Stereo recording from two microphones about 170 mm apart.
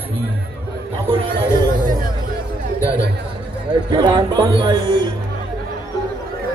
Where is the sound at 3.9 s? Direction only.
25° right (ahead or behind).